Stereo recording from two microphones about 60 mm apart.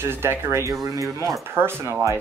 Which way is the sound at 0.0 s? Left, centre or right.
Right.